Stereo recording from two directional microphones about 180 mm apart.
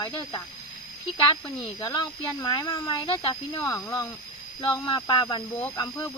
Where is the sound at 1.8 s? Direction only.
25° left (ahead or behind).